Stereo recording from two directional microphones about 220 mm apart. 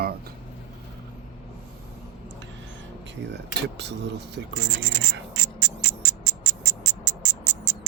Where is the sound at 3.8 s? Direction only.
50° right (ahead or behind).